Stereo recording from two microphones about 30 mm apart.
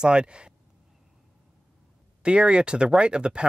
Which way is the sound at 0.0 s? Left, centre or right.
Right.